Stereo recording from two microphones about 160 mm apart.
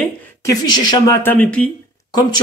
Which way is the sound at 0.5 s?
25° left (ahead or behind).